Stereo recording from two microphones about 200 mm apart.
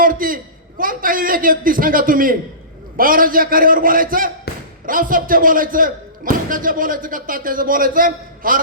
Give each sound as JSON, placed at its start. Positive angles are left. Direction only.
{"t": 0.0, "sound": "a man's voice", "side_deg": -45}
{"t": 4.5, "sound": "a sound", "side_deg": 55}
{"t": 4.9, "sound": "a man's voice", "side_deg": -45}